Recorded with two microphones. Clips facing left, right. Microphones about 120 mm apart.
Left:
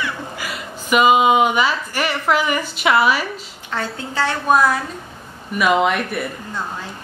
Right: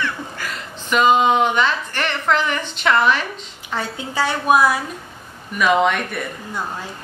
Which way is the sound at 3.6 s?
Centre (ahead or behind).